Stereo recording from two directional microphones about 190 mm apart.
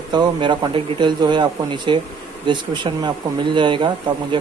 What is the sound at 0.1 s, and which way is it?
Speech, 25° right (ahead or behind).